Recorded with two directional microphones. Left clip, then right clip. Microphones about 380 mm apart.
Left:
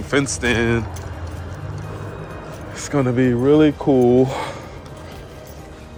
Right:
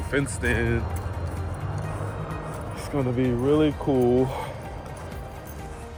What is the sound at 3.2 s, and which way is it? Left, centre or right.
Speech, left.